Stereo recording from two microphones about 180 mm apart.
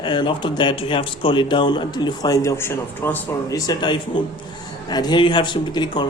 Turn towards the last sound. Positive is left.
turn(degrees=25)  # may be behind; listen again after turning